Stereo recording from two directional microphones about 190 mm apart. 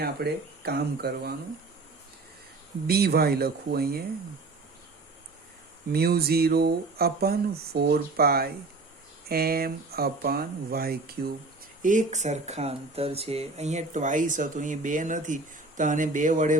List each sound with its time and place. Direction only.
0.0 s speech: 55° right (ahead or behind)
2.8 s speech: 55° right (ahead or behind)
5.9 s speech: 55° right (ahead or behind)
11.8 s speech: 40° right (ahead or behind)